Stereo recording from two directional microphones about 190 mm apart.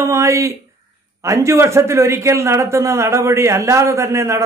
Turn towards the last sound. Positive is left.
turn(degrees=-15)  # may be behind; listen again after turning